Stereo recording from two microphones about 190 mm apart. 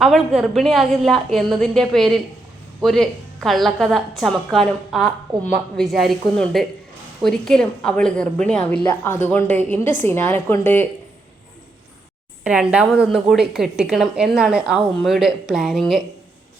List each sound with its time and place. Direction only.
0.0 s a woman's voice: centre (ahead or behind)
12.5 s a woman's voice: 5° right (ahead or behind)